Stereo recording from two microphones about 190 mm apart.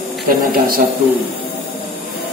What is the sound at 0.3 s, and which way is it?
Speech, 50° right (ahead or behind).